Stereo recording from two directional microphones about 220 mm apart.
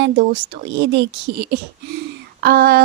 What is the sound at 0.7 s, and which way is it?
A woman's voice, 50° right (ahead or behind).